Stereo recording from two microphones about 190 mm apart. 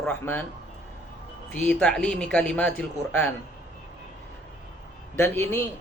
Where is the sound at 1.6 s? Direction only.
5° left (ahead or behind).